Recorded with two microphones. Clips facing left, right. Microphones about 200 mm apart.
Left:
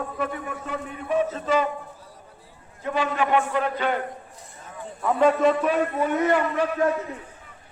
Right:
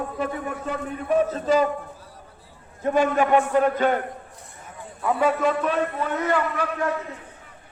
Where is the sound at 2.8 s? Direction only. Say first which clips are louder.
Right 5 dB; 45° right (ahead or behind).